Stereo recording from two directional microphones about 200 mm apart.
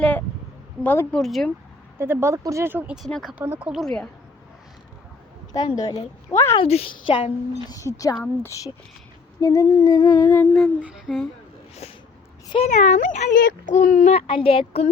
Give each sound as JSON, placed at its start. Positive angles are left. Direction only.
{"t": 0.0, "sound": "a sound", "side_deg": 5}
{"t": 0.9, "sound": "speech", "side_deg": 5}
{"t": 2.0, "sound": "speech", "side_deg": -10}
{"t": 3.7, "sound": "speech", "side_deg": 0}
{"t": 5.5, "sound": "a woman's voice", "side_deg": 20}
{"t": 6.6, "sound": "a woman's voice", "side_deg": 30}
{"t": 7.7, "sound": "a woman's voice", "side_deg": 15}
{"t": 10.6, "sound": "speech", "side_deg": 0}
{"t": 11.8, "sound": "a sound", "side_deg": 30}
{"t": 12.5, "sound": "speech", "side_deg": 30}